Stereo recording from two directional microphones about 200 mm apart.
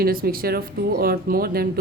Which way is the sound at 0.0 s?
45° right (ahead or behind).